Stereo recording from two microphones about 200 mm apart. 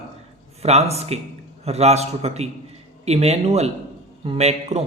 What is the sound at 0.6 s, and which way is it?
A man's voice, 30° right (ahead or behind).